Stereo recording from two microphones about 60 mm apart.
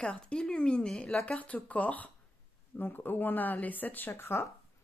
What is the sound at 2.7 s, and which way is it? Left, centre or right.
Speech, left.